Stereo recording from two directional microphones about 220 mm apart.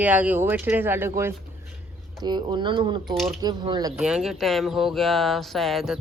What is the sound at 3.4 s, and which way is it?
Speech, 20° right (ahead or behind).